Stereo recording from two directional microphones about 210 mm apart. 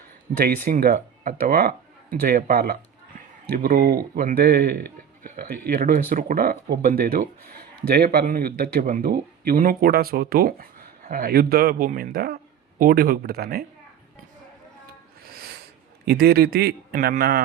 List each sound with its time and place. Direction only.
0.3 s speech: 45° right (ahead or behind)
15.2 s owl: 45° right (ahead or behind)
16.0 s speech: 50° right (ahead or behind)